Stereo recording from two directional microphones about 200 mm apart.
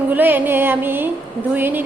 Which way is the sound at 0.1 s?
10° right (ahead or behind).